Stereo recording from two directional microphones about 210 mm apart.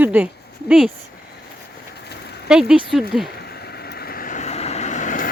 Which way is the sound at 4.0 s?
45° left (ahead or behind).